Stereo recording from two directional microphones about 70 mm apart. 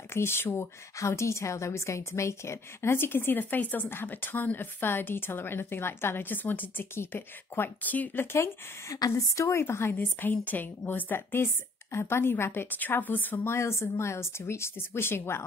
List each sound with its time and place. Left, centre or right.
0.1 s a woman's voice: left
8.3 s a woman's voice: left
8.9 s a woman's voice: left
9.9 s a woman's voice: left
13.5 s a woman's voice: left